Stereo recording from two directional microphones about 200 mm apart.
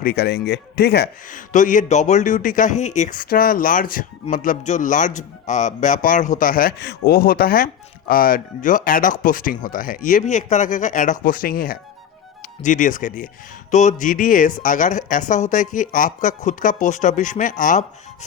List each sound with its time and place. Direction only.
0.0 s a man's voice: 50° left (ahead or behind)